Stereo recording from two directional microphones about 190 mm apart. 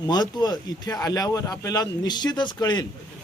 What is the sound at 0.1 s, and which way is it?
Speech, 20° left (ahead or behind).